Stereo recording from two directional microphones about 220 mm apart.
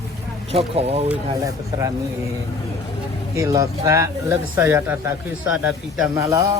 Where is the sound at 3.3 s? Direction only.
15° right (ahead or behind).